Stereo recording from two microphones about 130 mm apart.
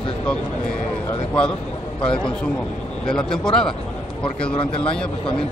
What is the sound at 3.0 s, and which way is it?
Speech, 5° left (ahead or behind).